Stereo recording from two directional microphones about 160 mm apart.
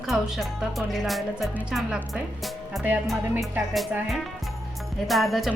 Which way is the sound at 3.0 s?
Centre (ahead or behind).